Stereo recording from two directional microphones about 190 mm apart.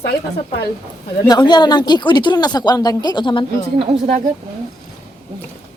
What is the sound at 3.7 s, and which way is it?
Speech, 30° right (ahead or behind).